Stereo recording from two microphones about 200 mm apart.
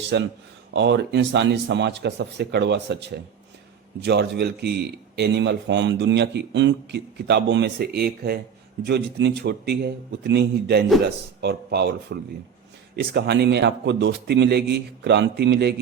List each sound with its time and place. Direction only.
0.1 s speech: 60° right (ahead or behind)